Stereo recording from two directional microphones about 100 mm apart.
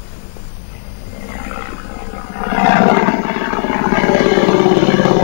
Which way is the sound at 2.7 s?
5° right (ahead or behind).